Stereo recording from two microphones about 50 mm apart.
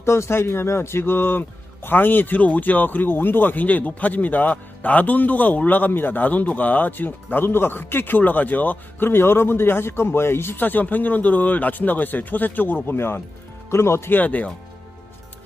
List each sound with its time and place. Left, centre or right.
0.0 s speech: left
10.6 s speech: left
13.7 s speech: left
14.1 s speech: left